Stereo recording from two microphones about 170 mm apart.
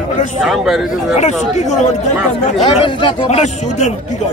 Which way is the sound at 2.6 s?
30° left (ahead or behind).